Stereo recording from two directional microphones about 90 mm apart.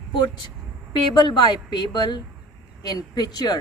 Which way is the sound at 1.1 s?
65° left (ahead or behind).